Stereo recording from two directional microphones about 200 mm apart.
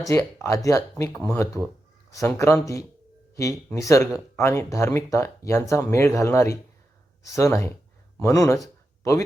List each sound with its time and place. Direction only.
0.1 s speech: 15° left (ahead or behind)
1.1 s speech: 5° left (ahead or behind)
2.0 s speech: 15° left (ahead or behind)
8.6 s a sound: 15° left (ahead or behind)